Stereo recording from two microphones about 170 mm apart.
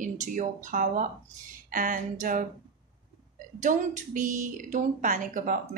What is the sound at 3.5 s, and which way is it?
Speech, 45° right (ahead or behind).